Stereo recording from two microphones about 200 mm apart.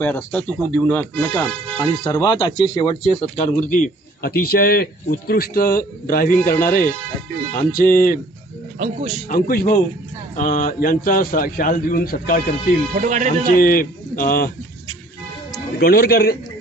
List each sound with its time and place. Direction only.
0.0 s speech: 10° left (ahead or behind); by 8.2 s 45° left (ahead or behind)
8.8 s speech: 30° right (ahead or behind)
9.3 s speech: 45° left (ahead or behind)
13.0 s speech: 40° right (ahead or behind)
13.6 s speech: 45° left (ahead or behind)
15.8 s speech: 50° left (ahead or behind)